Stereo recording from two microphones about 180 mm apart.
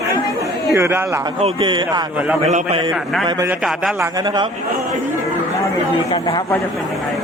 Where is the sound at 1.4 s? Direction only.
25° right (ahead or behind).